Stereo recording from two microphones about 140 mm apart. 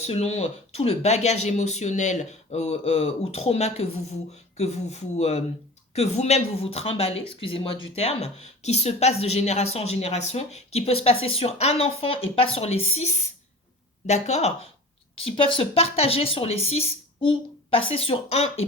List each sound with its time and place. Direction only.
0.0 s speech: 50° left (ahead or behind)